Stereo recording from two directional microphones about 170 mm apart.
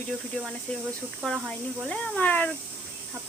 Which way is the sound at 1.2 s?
5° left (ahead or behind).